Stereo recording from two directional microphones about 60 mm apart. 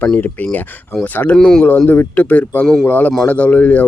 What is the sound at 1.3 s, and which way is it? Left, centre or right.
Speech, centre.